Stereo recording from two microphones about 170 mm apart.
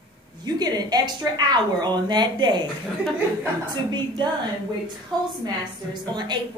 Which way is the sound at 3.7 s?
25° right (ahead or behind).